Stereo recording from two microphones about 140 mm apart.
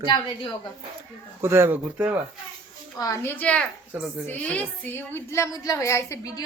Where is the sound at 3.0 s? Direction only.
25° left (ahead or behind).